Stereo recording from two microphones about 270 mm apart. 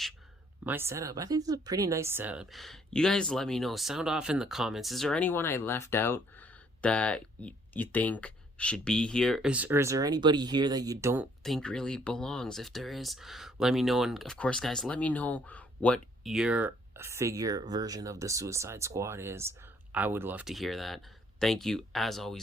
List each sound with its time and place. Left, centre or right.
0.6 s speech: centre